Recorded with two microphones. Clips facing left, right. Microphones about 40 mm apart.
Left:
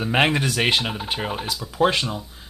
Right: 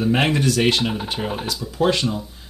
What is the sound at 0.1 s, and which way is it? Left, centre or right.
Speech, left.